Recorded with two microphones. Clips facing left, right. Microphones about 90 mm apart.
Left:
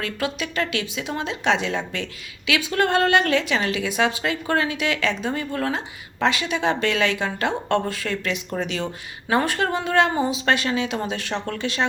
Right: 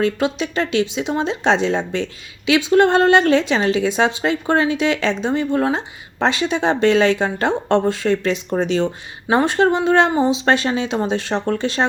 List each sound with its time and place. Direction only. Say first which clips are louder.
0.0 s a woman's voice: right 8 dB; 30° right (ahead or behind)